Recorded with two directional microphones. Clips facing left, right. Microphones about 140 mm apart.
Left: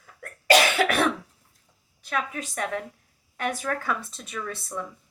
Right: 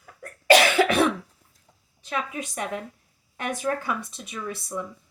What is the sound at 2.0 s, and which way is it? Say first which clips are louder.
Speech: even; 20° right (ahead or behind).